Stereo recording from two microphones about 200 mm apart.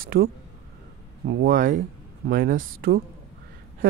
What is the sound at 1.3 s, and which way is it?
Speech, 60° right (ahead or behind).